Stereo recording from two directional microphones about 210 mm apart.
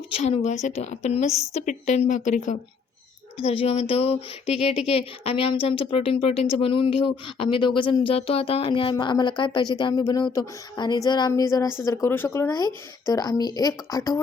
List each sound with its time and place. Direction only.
0.2 s a woman's voice: 35° left (ahead or behind); by 14.2 s 15° left (ahead or behind)